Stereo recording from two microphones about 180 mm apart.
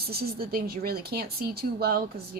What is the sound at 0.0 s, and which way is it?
Speech, 60° right (ahead or behind).